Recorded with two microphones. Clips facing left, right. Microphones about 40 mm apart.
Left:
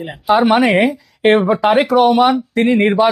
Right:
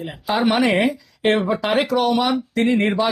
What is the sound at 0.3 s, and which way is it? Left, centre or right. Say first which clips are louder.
Speech: left 5 dB; centre.